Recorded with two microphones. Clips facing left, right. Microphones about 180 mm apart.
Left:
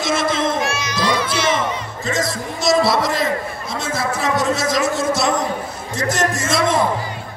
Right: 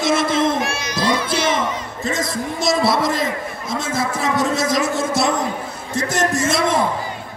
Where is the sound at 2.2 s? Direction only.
55° right (ahead or behind).